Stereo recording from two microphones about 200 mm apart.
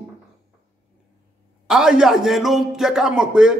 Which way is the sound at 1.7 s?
5° right (ahead or behind).